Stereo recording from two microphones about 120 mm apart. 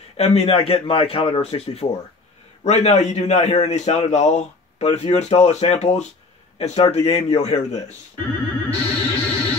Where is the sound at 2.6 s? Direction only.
65° left (ahead or behind).